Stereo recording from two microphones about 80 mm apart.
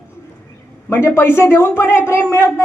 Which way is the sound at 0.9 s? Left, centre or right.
Left.